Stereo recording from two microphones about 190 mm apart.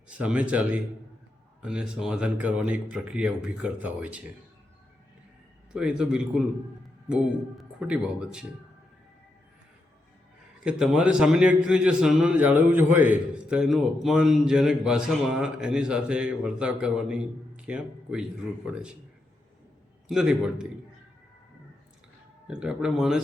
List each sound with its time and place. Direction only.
0.2 s a man's voice: 5° right (ahead or behind)
5.7 s a man's voice: 5° right (ahead or behind)
7.6 s speech: 5° right (ahead or behind)
10.6 s a man's voice: 5° right (ahead or behind)
20.1 s a man's voice: centre (ahead or behind)
22.4 s a man's voice: 5° right (ahead or behind)